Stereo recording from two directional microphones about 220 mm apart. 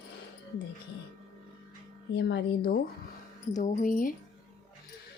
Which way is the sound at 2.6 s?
45° left (ahead or behind).